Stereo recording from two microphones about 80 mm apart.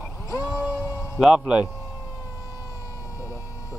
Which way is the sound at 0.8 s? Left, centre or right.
Left.